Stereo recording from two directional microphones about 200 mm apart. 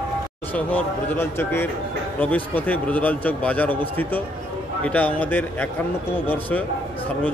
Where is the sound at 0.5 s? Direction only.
5° left (ahead or behind).